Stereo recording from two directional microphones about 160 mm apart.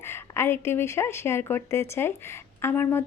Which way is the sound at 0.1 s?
15° left (ahead or behind).